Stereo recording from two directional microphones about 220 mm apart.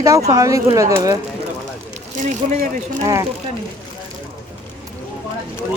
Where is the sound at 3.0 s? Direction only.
15° right (ahead or behind).